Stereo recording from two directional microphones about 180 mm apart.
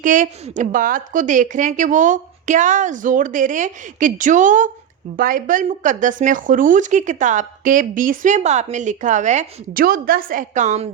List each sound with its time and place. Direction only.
0.0 s speech: 45° right (ahead or behind)